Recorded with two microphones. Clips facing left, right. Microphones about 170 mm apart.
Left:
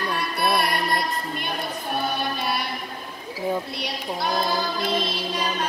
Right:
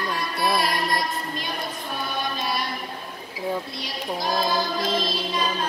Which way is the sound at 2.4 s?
60° left (ahead or behind).